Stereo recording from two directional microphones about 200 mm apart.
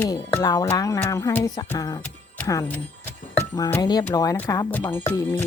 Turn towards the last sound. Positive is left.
turn(degrees=15)  # may be behind; listen again after turning